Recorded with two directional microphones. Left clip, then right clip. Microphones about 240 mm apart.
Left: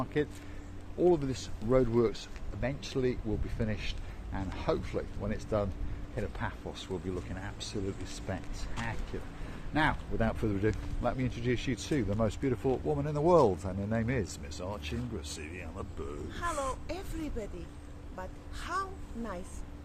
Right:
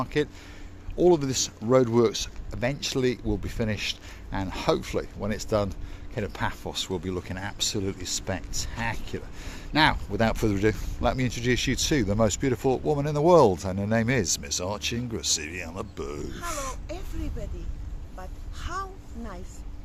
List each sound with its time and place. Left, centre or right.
0.0 s speech: right
16.3 s speech: centre
18.2 s a woman's voice: centre